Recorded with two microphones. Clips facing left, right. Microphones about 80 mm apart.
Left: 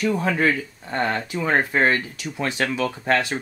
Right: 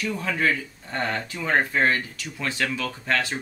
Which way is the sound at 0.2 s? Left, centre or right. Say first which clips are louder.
Left 4 dB; left.